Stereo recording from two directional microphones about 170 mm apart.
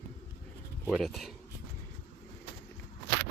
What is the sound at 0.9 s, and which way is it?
Speech, centre (ahead or behind).